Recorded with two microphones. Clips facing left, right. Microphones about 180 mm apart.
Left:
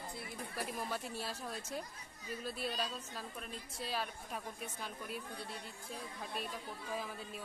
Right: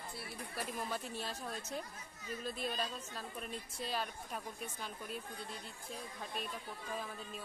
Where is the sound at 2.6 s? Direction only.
5° left (ahead or behind).